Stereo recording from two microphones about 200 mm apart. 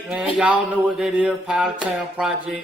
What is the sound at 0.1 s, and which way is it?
A man's voice, centre (ahead or behind).